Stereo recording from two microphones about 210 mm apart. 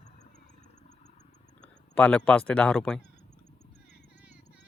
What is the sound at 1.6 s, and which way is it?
Speech, 5° left (ahead or behind).